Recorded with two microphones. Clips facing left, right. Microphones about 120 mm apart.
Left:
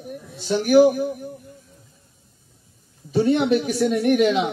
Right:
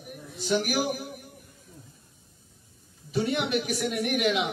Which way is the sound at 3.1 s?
30° left (ahead or behind).